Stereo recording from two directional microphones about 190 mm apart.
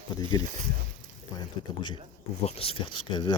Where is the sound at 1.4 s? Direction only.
25° left (ahead or behind).